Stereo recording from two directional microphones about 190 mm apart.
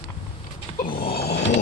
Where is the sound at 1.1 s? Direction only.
60° left (ahead or behind).